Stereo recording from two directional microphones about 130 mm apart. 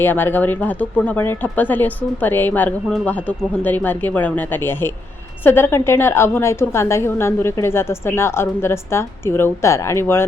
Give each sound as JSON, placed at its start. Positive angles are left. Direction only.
{"t": 0.0, "sound": "a woman's voice", "side_deg": 15}